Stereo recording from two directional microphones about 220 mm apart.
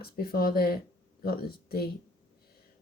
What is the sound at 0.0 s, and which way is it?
Speech, 45° left (ahead or behind).